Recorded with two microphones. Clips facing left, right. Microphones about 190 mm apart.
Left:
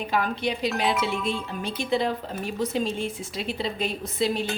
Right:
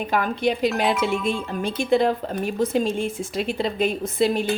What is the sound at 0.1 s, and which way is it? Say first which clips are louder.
Speech: right 4 dB; 50° right (ahead or behind).